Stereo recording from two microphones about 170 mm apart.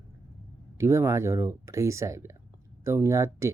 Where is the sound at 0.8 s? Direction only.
15° right (ahead or behind).